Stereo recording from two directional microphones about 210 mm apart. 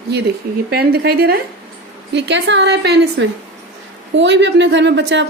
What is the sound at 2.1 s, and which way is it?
A woman's voice, 55° right (ahead or behind).